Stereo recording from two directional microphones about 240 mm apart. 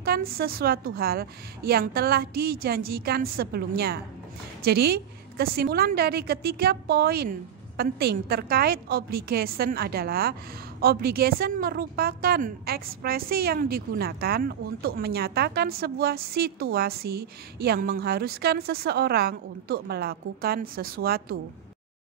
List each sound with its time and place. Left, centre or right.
0.0 s a woman's voice: right